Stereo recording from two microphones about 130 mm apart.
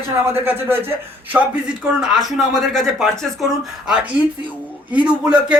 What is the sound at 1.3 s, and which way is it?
A man's voice, 5° right (ahead or behind).